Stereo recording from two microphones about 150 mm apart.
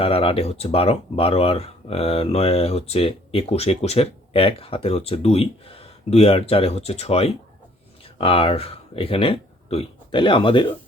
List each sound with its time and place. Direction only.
0.0 s speech: 40° left (ahead or behind)